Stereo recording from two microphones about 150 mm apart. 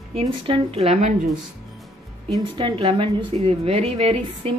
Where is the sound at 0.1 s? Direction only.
40° right (ahead or behind).